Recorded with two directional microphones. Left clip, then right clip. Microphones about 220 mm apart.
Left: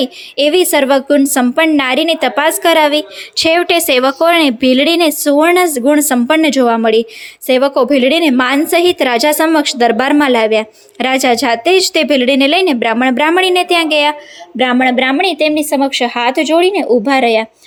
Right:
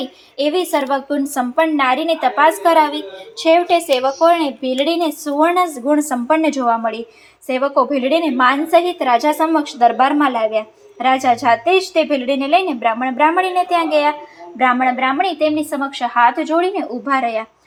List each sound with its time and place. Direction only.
0.3 s a woman's voice: 50° left (ahead or behind)
14.6 s speech: 65° left (ahead or behind)